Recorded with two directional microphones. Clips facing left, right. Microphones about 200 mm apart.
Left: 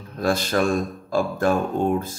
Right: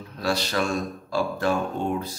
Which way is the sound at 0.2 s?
50° left (ahead or behind).